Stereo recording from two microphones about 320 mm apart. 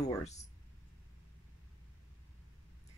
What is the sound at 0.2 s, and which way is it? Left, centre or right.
Speech, left.